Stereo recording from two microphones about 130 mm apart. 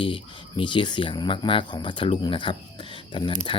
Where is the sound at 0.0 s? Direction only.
40° left (ahead or behind).